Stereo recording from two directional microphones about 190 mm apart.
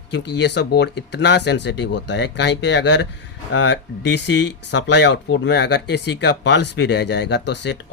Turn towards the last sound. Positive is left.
turn(degrees=65)  # may be behind; listen again after turning